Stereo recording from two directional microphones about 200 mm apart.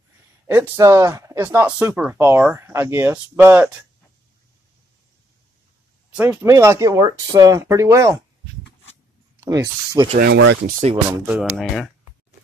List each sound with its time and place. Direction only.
0.5 s speech: 10° right (ahead or behind)
6.1 s speech: 10° right (ahead or behind)
9.4 s speech: 20° right (ahead or behind)
10.1 s speech: 55° right (ahead or behind)
10.7 s speech: 35° right (ahead or behind)
11.1 s speech: 5° right (ahead or behind)